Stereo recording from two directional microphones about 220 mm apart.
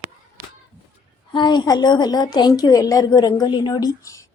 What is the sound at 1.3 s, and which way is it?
A woman's voice, 20° left (ahead or behind).